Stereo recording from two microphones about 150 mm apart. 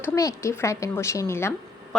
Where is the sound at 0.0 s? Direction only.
20° left (ahead or behind).